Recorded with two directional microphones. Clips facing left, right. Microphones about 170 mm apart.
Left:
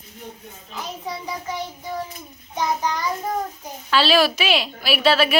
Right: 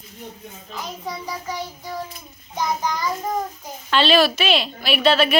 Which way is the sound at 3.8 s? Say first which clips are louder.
Right 1 dB; 5° left (ahead or behind).